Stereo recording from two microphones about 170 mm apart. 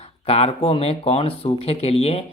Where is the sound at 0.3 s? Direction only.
35° left (ahead or behind).